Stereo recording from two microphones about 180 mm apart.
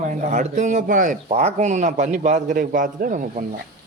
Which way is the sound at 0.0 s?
40° right (ahead or behind).